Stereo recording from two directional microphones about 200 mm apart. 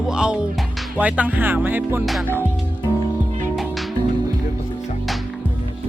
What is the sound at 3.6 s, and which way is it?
Music, centre (ahead or behind).